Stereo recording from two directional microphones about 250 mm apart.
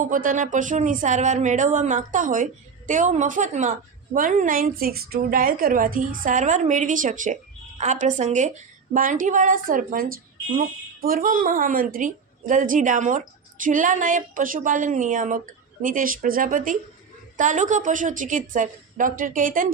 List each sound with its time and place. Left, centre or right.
0.0 s speech: right